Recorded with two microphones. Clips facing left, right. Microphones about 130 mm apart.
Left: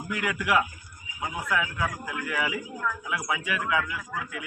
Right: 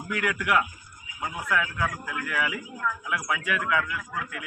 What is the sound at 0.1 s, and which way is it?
A man's voice, 5° left (ahead or behind).